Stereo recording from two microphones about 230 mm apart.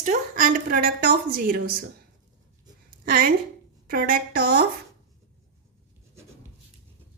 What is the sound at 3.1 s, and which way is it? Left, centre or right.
A woman's voice, right.